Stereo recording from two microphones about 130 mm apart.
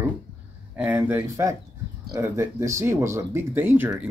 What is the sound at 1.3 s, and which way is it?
Speech, 25° right (ahead or behind).